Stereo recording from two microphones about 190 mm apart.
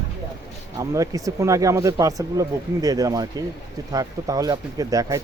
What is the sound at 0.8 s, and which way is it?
Speech, 15° right (ahead or behind).